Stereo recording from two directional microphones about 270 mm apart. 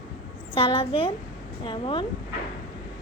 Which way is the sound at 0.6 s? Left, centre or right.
Centre.